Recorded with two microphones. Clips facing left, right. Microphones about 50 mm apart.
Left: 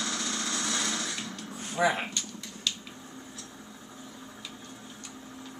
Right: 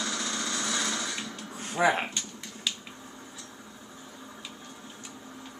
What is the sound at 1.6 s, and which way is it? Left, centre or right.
Speech, right.